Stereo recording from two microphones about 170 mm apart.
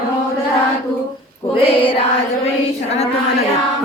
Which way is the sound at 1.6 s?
35° left (ahead or behind).